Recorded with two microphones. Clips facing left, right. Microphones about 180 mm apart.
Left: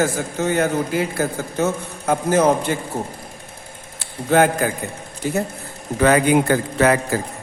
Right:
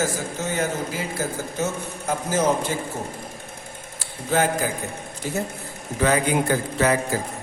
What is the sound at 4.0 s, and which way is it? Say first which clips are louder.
Speech: left 6 dB; 60° left (ahead or behind).